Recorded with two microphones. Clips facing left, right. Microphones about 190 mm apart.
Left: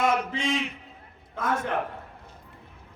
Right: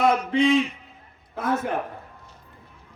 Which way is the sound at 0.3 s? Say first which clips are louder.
Right 9 dB; 65° right (ahead or behind).